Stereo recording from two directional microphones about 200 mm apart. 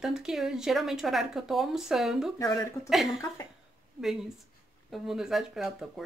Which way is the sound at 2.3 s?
15° left (ahead or behind).